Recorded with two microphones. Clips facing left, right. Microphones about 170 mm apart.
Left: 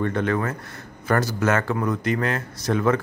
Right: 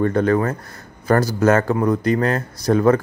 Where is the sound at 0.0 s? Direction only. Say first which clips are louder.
Right 6 dB; 40° right (ahead or behind).